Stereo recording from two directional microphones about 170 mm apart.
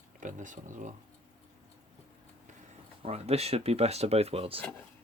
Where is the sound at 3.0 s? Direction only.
35° right (ahead or behind).